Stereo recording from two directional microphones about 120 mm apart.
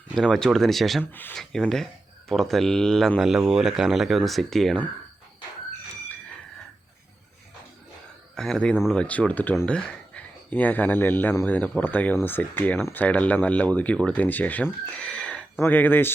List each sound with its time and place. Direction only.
0.2 s speech: 5° left (ahead or behind)
8.4 s speech: 5° left (ahead or behind)